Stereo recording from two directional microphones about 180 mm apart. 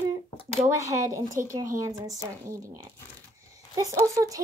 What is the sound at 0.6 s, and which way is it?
Speech, 15° right (ahead or behind).